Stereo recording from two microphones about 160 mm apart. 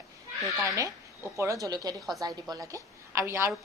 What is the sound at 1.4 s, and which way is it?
Speech, 20° right (ahead or behind).